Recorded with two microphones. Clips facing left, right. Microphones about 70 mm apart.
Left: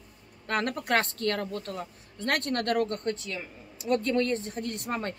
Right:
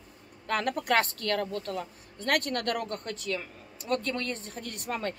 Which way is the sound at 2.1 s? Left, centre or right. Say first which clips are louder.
Even; left.